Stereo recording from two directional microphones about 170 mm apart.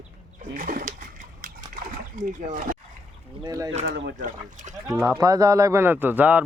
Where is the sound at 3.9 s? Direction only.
75° right (ahead or behind).